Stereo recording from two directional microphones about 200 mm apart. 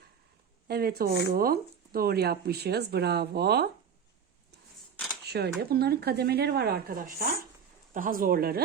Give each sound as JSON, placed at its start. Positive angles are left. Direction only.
{"t": 0.7, "sound": "speech", "side_deg": -50}
{"t": 5.2, "sound": "speech", "side_deg": -55}